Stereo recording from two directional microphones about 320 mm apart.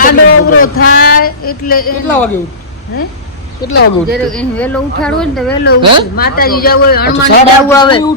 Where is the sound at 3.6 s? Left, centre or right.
Left.